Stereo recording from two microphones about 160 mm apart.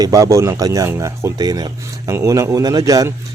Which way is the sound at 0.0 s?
20° right (ahead or behind).